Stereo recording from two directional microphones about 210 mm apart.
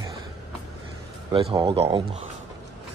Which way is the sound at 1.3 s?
25° right (ahead or behind).